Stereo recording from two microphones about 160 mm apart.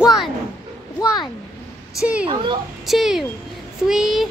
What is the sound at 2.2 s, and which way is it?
Speech, 30° right (ahead or behind).